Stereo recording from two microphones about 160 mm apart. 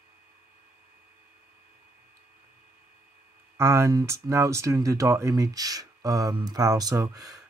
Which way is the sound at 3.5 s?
15° right (ahead or behind).